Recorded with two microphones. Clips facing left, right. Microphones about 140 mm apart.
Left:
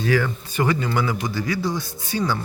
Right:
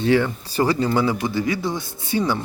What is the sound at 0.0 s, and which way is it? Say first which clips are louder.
Speech: right 3 dB; 25° right (ahead or behind).